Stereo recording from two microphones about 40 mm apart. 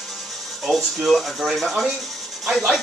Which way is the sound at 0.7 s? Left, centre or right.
Centre.